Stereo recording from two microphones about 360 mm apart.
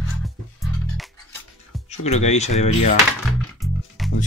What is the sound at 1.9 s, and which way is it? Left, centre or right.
Speech, centre.